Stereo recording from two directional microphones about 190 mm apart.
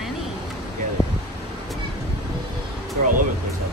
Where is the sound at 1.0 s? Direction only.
20° right (ahead or behind).